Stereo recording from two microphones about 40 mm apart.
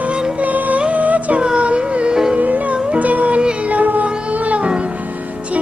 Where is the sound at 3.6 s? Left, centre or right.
Right.